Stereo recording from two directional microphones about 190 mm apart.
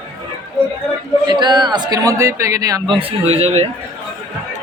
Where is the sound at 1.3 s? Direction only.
25° right (ahead or behind).